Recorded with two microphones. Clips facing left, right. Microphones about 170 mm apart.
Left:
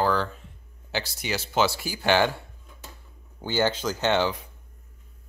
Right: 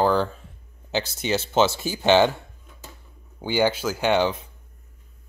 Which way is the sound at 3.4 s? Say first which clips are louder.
Right 3 dB; 15° right (ahead or behind).